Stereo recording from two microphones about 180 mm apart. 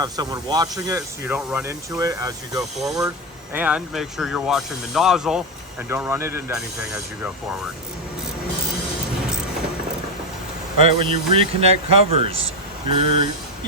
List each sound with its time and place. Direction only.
0.0 s speech: 20° right (ahead or behind)
2.7 s speech: centre (ahead or behind)
5.9 s speech: 15° right (ahead or behind)
10.8 s speech: 30° right (ahead or behind)